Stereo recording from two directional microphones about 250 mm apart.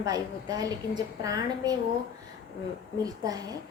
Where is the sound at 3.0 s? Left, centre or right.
Centre.